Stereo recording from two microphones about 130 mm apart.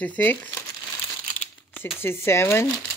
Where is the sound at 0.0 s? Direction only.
10° left (ahead or behind).